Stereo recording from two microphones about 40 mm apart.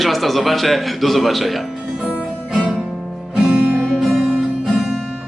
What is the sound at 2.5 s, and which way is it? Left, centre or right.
Music, centre.